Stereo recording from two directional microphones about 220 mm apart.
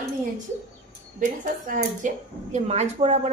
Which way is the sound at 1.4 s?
35° right (ahead or behind).